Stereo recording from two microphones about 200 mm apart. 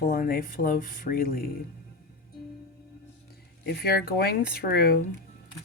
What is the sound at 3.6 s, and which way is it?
Speech, 55° left (ahead or behind).